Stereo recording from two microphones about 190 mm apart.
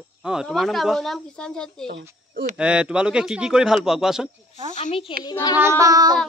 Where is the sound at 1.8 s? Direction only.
55° right (ahead or behind).